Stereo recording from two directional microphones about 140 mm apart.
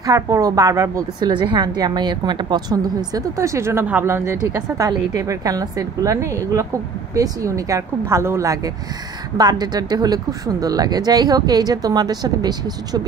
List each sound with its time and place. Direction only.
0.0 s speech: 25° right (ahead or behind)